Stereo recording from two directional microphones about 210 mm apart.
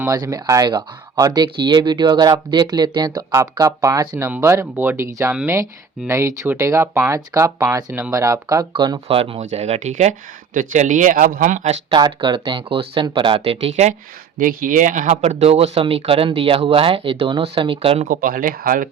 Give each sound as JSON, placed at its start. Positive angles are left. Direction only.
{"t": 0.0, "sound": "speech", "side_deg": -15}
{"t": 11.9, "sound": "speech", "side_deg": -20}
{"t": 14.3, "sound": "speech", "side_deg": -40}
{"t": 18.0, "sound": "speech", "side_deg": -40}